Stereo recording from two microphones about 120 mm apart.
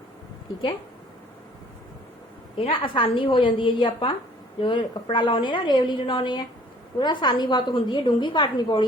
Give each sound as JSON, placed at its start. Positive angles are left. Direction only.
{"t": 2.6, "sound": "a woman's voice", "side_deg": 50}